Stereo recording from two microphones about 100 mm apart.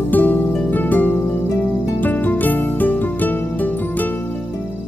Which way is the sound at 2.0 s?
20° left (ahead or behind).